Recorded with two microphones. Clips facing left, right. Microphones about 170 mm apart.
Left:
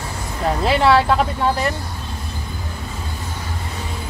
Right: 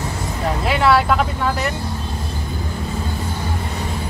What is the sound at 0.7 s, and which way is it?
Speech, 30° left (ahead or behind).